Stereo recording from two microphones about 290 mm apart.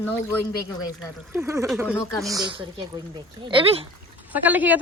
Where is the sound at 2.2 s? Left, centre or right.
Centre.